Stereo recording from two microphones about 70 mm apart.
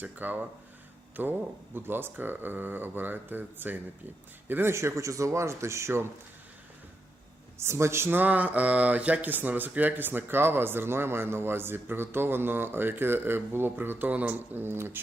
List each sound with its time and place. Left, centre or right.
0.0 s a man's voice: right
4.7 s speech: right
7.6 s speech: right